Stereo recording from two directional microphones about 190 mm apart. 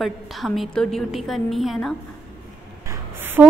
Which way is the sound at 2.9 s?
10° right (ahead or behind).